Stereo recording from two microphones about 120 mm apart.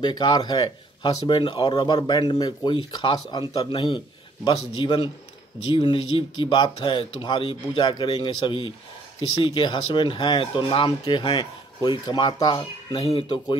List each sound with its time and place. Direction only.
0.0 s speech: 40° left (ahead or behind)